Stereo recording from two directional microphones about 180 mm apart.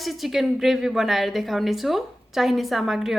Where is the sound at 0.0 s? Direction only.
Centre (ahead or behind).